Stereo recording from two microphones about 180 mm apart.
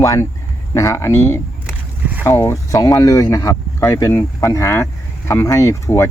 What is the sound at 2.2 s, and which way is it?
Speech, 15° left (ahead or behind).